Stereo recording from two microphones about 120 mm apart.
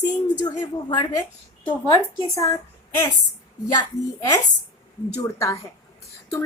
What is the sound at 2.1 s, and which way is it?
Speech, 50° right (ahead or behind).